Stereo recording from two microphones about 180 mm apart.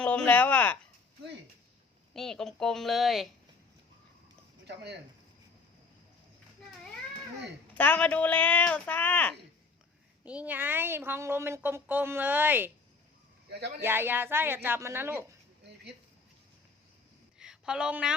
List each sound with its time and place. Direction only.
0.0 s speech: 5° left (ahead or behind)
2.1 s speech: 5° left (ahead or behind)
4.6 s speech: 70° right (ahead or behind)
7.7 s speech: 10° left (ahead or behind)
10.2 s speech: 10° right (ahead or behind)
13.5 s speech: 65° right (ahead or behind)
13.8 s speech: 10° right (ahead or behind)
15.6 s a sound: 70° right (ahead or behind)
17.4 s a woman's voice: 5° right (ahead or behind)